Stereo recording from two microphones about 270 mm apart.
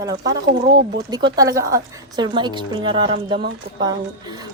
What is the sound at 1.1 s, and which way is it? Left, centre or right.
A woman's voice, centre.